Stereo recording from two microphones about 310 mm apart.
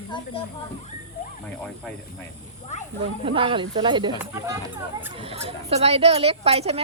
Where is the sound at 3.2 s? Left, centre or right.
Centre.